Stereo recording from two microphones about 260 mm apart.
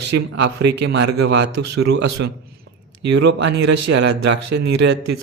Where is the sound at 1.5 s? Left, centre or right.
Right.